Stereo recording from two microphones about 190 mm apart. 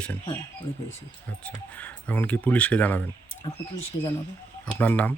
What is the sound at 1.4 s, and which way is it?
Speech, 5° left (ahead or behind).